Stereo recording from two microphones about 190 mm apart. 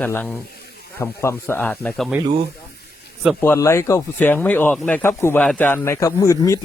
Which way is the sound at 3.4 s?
15° left (ahead or behind).